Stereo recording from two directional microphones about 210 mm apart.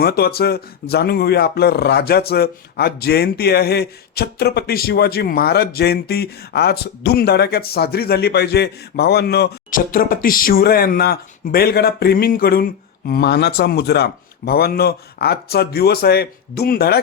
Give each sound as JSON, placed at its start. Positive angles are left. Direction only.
{"t": 0.0, "sound": "speech", "side_deg": 45}